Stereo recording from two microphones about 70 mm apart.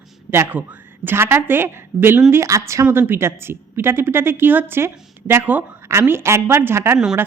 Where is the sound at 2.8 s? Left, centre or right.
Right.